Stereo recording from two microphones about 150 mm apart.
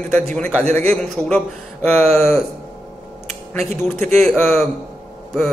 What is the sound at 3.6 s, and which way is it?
Speech, 50° right (ahead or behind).